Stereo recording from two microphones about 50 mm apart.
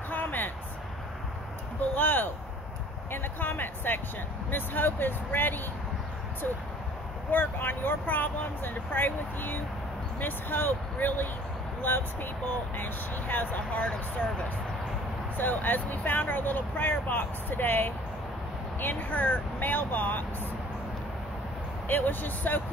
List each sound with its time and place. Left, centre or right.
0.1 s a sound: left
2.0 s speech: left
7.2 s speech: left
13.6 s speech: left
15.3 s speech: left
21.8 s speech: left